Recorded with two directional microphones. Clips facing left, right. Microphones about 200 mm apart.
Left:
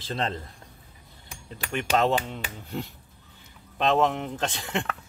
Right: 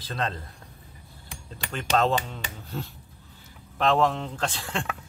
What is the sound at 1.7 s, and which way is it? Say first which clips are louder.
Speech: even; 15° left (ahead or behind).